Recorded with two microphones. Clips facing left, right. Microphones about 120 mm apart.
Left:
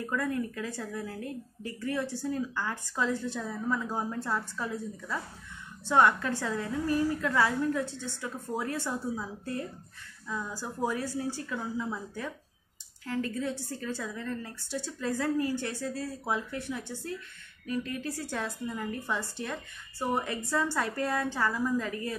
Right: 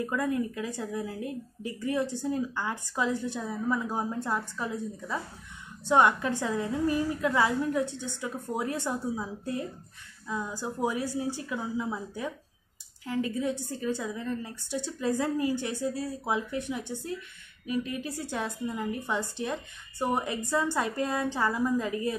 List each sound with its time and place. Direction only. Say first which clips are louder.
0.0 s a woman's voice: right 2 dB; 15° right (ahead or behind)